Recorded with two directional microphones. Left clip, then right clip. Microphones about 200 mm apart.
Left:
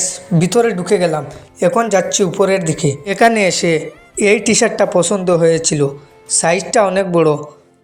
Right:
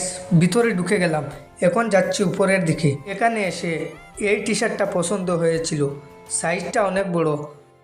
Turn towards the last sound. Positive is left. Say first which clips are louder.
# left 8 dB
turn(degrees=25)  # may be behind; listen again after turning